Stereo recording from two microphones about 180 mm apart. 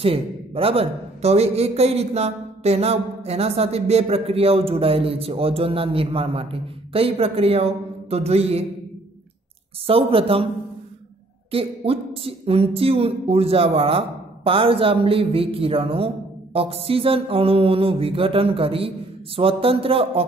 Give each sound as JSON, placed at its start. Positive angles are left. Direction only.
{"t": 0.0, "sound": "a man's voice", "side_deg": -30}
{"t": 9.8, "sound": "a man's voice", "side_deg": -30}
{"t": 11.5, "sound": "a man's voice", "side_deg": -30}